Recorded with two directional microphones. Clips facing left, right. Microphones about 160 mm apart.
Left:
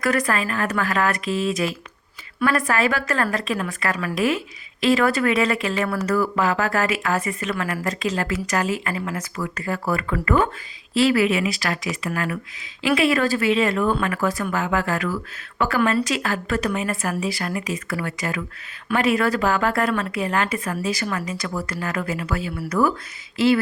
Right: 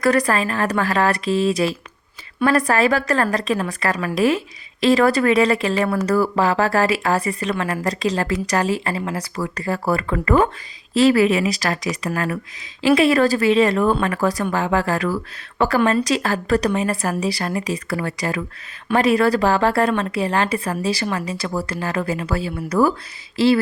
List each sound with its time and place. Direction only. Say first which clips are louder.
0.0 s a woman's voice: right 4 dB; 35° right (ahead or behind)